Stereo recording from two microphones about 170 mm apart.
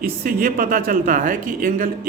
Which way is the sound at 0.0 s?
55° right (ahead or behind).